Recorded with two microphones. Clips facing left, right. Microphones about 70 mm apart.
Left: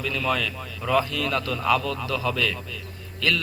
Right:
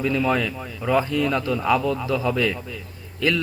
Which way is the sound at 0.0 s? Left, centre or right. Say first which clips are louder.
Right 4 dB; right.